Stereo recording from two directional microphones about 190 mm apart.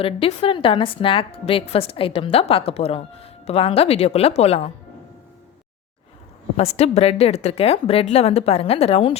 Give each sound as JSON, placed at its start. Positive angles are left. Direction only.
{"t": 0.0, "sound": "a woman's voice", "side_deg": 30}
{"t": 6.7, "sound": "a woman's voice", "side_deg": 35}